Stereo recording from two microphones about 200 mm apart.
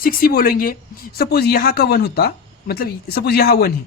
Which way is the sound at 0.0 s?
45° left (ahead or behind).